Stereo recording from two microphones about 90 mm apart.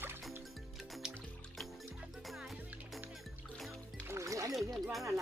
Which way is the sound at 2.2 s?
Centre (ahead or behind).